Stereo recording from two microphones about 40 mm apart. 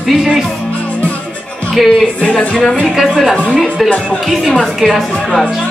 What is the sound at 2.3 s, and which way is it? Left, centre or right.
A woman's voice, centre.